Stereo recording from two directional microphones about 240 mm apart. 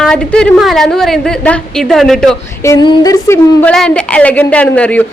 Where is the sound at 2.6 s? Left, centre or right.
Centre.